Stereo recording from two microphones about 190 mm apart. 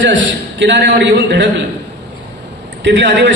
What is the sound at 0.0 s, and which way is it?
A man's voice, 75° right (ahead or behind).